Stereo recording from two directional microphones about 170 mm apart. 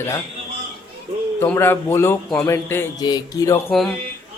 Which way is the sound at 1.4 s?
15° left (ahead or behind).